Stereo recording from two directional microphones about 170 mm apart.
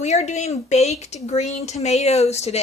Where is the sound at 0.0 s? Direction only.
40° left (ahead or behind).